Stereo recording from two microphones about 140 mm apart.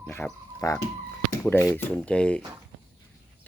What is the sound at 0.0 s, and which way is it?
Speech, 15° left (ahead or behind).